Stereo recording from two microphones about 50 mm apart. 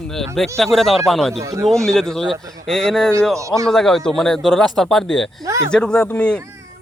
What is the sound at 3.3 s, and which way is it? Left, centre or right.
Speech, right.